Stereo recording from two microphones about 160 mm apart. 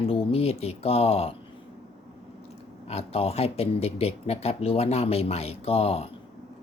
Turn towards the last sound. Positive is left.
turn(degrees=40)  # may be behind; listen again after turning